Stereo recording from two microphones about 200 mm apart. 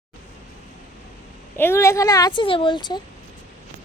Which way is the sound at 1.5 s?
10° left (ahead or behind).